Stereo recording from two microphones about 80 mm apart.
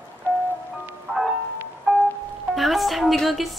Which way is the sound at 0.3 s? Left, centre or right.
Left.